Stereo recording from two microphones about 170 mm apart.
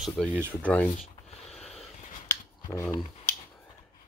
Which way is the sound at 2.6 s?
15° left (ahead or behind).